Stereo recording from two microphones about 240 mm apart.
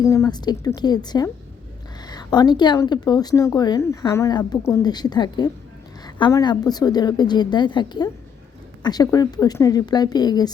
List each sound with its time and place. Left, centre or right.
0.0 s speech: centre